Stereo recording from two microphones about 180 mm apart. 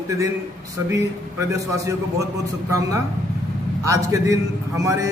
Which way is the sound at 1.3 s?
15° right (ahead or behind).